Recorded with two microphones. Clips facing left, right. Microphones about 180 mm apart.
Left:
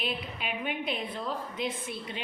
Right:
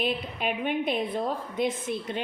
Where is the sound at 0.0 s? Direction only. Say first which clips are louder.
Right 6 dB; 50° right (ahead or behind).